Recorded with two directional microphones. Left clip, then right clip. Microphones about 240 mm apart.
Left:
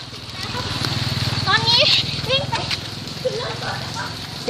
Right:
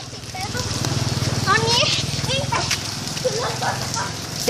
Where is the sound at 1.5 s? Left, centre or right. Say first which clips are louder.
Left 2 dB; left.